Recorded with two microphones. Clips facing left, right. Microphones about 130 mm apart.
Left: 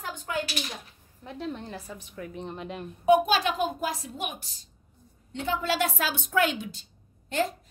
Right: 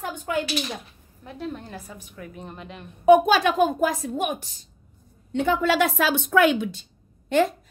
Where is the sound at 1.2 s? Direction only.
5° right (ahead or behind).